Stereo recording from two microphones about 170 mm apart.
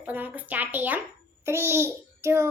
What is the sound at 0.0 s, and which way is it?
Speech, 10° right (ahead or behind).